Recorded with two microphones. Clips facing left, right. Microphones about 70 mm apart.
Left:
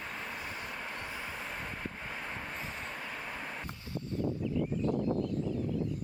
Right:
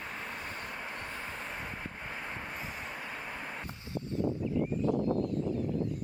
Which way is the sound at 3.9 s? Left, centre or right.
Right.